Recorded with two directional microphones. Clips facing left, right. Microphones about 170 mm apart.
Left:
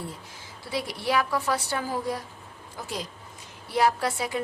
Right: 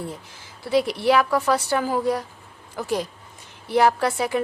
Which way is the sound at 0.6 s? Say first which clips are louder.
Right 10 dB; 65° right (ahead or behind).